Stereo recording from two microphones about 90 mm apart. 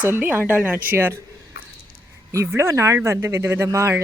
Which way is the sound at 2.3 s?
35° right (ahead or behind).